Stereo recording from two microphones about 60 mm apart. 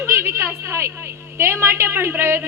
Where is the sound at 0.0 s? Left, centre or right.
Right.